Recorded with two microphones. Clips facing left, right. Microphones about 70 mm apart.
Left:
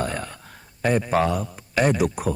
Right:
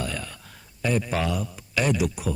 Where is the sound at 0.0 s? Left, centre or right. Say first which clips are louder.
Left 4 dB; left.